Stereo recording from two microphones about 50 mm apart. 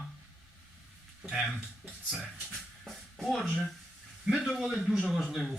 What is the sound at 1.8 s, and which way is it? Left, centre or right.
Speech, right.